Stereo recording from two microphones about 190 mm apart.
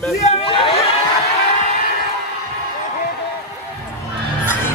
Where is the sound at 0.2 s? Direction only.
30° left (ahead or behind).